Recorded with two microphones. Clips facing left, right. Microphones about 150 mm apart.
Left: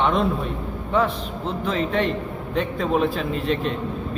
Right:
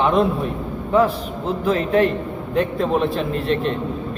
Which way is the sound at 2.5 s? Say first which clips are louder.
Right 3 dB; centre (ahead or behind).